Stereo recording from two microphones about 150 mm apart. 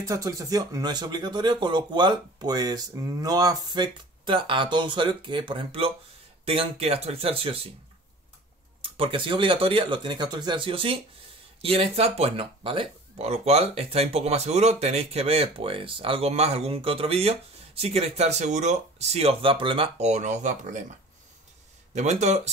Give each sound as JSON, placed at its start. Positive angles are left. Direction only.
{"t": 0.0, "sound": "speech", "side_deg": -20}
{"t": 8.8, "sound": "speech", "side_deg": -35}
{"t": 21.9, "sound": "speech", "side_deg": -50}